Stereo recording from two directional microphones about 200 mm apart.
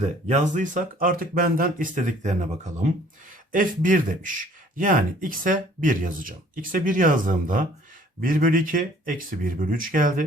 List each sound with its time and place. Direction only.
0.0 s speech: 35° right (ahead or behind)